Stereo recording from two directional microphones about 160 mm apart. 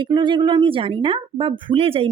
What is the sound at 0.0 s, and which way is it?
Speech, 30° right (ahead or behind).